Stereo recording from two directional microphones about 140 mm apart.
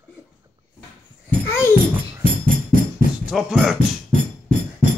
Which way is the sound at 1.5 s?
20° left (ahead or behind).